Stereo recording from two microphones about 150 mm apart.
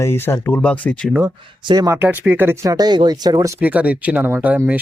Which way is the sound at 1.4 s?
30° right (ahead or behind).